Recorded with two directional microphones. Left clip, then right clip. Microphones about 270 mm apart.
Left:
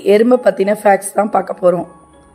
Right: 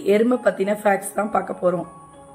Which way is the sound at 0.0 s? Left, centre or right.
Left.